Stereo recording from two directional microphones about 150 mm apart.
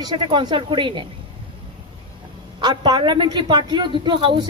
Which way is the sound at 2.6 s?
30° right (ahead or behind).